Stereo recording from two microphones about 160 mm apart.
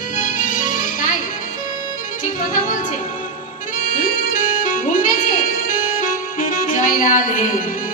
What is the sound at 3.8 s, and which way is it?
Music, 60° left (ahead or behind).